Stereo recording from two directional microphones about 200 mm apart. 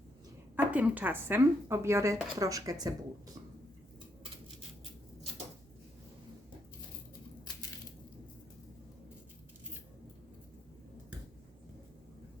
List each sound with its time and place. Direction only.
0.5 s speech: 10° right (ahead or behind)